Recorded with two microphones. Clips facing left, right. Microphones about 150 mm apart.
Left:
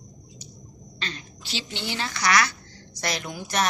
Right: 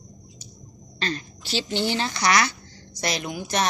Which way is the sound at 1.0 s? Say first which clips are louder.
Right 8 dB; 40° right (ahead or behind).